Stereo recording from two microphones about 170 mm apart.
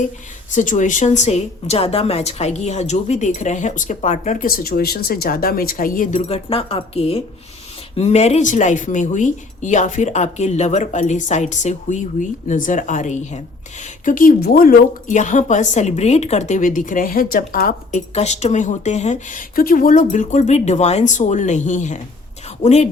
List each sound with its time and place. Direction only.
0.5 s a woman's voice: 50° left (ahead or behind)
6.2 s a woman's voice: 35° left (ahead or behind); by 18.0 s 55° left (ahead or behind)
18.1 s a woman's voice: 40° left (ahead or behind)